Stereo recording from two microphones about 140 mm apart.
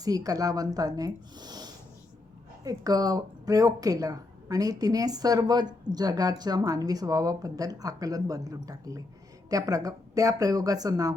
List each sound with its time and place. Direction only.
0.0 s a woman's voice: 25° right (ahead or behind)